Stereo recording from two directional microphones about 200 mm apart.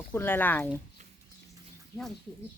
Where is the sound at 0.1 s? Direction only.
10° left (ahead or behind).